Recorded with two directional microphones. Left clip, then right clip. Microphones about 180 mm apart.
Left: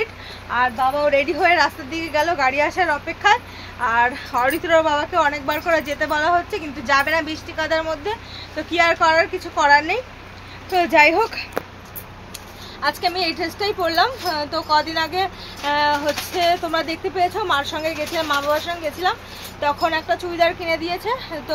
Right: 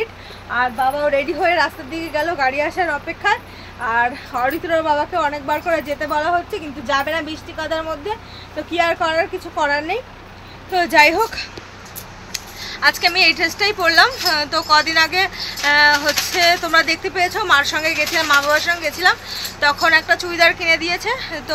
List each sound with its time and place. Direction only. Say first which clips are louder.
0.5 s speech: right 1 dB; 5° left (ahead or behind)